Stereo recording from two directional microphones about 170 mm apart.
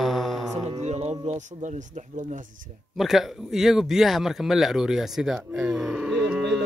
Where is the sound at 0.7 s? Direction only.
40° right (ahead or behind).